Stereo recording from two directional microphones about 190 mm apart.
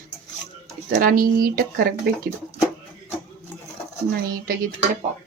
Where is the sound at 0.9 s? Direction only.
50° right (ahead or behind).